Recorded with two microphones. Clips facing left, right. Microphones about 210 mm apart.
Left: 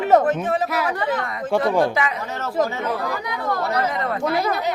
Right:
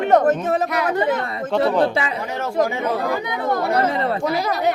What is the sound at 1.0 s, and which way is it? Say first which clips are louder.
Speech: right 4 dB; 25° right (ahead or behind).